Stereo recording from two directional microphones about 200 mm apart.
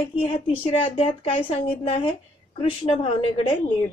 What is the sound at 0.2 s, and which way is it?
A woman's voice, 25° left (ahead or behind).